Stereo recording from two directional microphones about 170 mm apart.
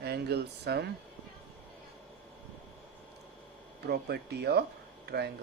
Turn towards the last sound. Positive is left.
turn(degrees=-70)  # may be behind; listen again after turning